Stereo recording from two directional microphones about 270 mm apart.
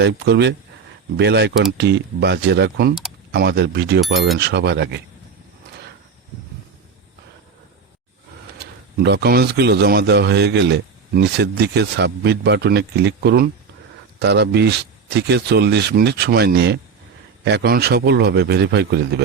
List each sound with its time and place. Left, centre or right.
0.0 s speech: right
8.5 s speech: right